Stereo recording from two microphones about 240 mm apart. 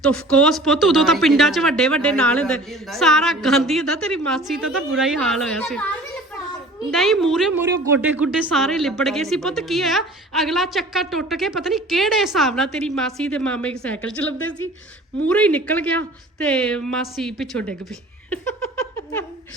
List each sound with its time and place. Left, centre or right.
0.0 s speech: centre